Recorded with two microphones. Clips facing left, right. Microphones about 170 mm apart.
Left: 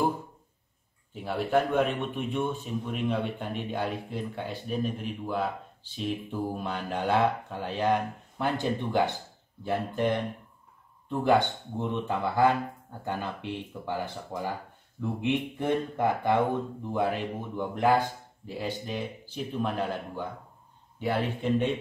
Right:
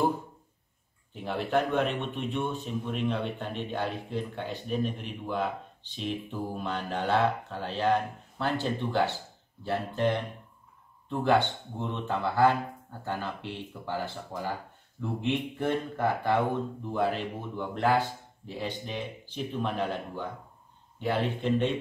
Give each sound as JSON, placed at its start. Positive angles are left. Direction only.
{"t": 1.1, "sound": "speech", "side_deg": 5}